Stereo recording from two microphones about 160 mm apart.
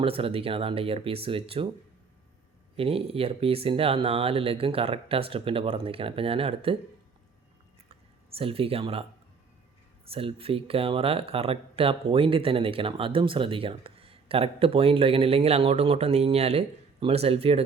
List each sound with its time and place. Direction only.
0.0 s speech: 35° right (ahead or behind)
2.7 s speech: 35° right (ahead or behind)
8.4 s speech: 35° right (ahead or behind)
10.1 s speech: 35° right (ahead or behind)